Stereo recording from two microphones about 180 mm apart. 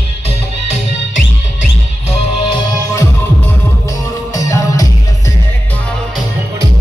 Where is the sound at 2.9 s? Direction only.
15° left (ahead or behind).